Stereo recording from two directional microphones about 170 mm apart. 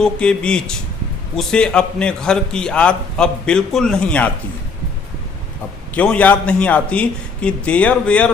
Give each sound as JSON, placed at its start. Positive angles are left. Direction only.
{"t": 0.0, "sound": "a man's voice", "side_deg": 5}
{"t": 5.9, "sound": "a man's voice", "side_deg": 10}